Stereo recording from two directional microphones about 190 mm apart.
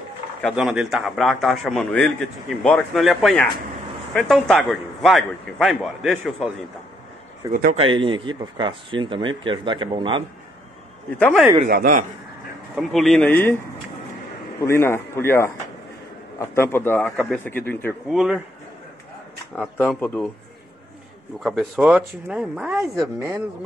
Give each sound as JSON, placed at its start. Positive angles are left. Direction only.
{"t": 0.4, "sound": "a man's voice", "side_deg": 0}
{"t": 7.7, "sound": "speech", "side_deg": -30}
{"t": 11.7, "sound": "speech", "side_deg": -50}
{"t": 12.7, "sound": "a man's voice", "side_deg": 0}
{"t": 14.6, "sound": "a man's voice", "side_deg": 15}
{"t": 18.1, "sound": "a man's voice", "side_deg": -5}
{"t": 19.5, "sound": "a man's voice", "side_deg": 5}
{"t": 21.4, "sound": "a man's voice", "side_deg": -5}
{"t": 23.1, "sound": "speech", "side_deg": -15}